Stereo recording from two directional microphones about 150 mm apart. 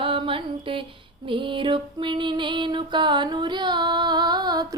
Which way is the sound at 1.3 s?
35° right (ahead or behind).